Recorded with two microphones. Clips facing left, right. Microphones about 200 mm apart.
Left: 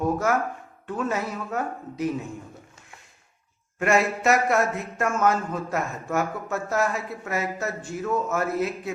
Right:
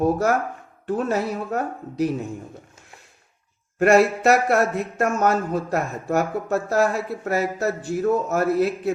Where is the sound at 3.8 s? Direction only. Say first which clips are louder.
Right 6 dB; 35° right (ahead or behind).